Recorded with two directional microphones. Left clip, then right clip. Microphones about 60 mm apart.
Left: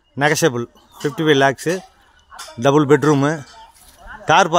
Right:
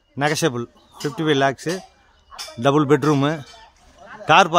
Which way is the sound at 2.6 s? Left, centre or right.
Left.